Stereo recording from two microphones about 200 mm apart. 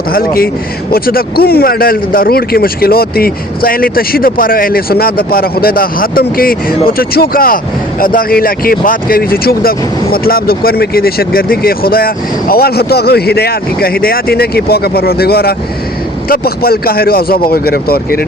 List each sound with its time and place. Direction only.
0.1 s speech: 50° left (ahead or behind)